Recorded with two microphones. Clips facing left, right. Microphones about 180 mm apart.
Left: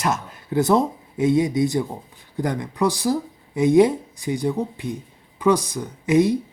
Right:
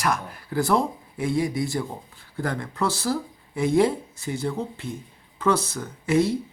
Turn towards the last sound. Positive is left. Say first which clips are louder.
# left 4 dB
turn(degrees=15)  # may be behind; listen again after turning